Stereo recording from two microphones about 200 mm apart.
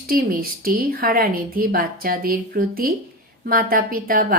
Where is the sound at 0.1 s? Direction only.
45° right (ahead or behind).